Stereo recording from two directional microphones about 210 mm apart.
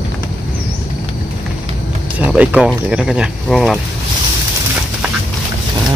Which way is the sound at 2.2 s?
5° right (ahead or behind).